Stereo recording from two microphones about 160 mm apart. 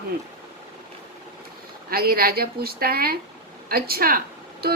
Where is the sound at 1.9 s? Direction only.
70° right (ahead or behind).